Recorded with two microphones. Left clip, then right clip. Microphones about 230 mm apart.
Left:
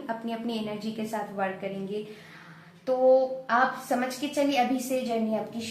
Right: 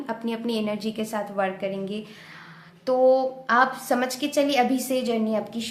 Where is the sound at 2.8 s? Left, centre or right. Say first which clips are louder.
Right 2 dB; right.